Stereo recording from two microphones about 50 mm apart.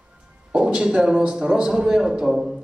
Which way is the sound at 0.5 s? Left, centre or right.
Centre.